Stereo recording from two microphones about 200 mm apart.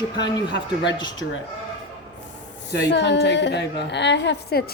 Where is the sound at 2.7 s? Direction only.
60° left (ahead or behind).